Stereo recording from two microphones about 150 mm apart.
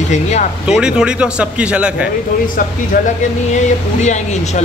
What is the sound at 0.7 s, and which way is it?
A man's voice, 5° right (ahead or behind).